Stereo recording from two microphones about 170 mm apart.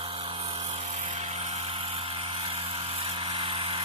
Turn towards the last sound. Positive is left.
turn(degrees=-30)  # may be behind; listen again after turning